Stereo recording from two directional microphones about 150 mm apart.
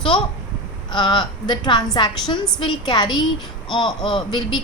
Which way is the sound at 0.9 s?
30° left (ahead or behind).